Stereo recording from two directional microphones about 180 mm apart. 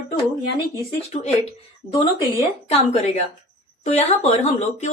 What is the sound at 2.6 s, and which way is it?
Speech, 35° left (ahead or behind).